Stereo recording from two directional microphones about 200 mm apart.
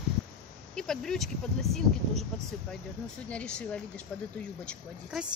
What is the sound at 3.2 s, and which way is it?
Speech, 5° left (ahead or behind).